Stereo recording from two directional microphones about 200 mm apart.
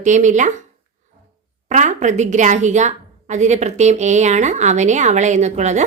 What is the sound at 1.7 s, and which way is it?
A woman's voice, 35° right (ahead or behind).